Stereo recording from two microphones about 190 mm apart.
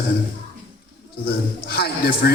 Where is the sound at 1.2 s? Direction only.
55° left (ahead or behind).